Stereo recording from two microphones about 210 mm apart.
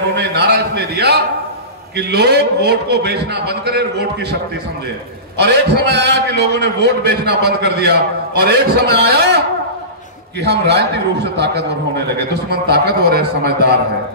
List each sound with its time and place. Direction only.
0.1 s a man's voice: 55° right (ahead or behind)
5.4 s a man's voice: 55° right (ahead or behind)
10.4 s a man's voice: 50° right (ahead or behind)